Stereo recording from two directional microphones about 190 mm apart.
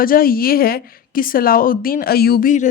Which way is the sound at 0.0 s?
50° left (ahead or behind).